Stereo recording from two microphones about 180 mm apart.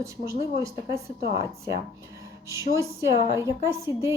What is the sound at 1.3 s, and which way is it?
Speech, 25° left (ahead or behind).